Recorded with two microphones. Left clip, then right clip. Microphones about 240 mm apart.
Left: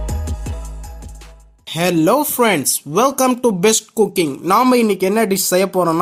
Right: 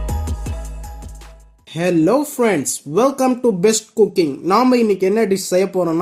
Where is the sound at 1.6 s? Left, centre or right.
Left.